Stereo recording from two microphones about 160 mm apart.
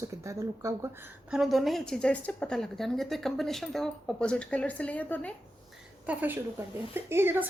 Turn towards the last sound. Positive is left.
turn(degrees=-15)  # may be behind; listen again after turning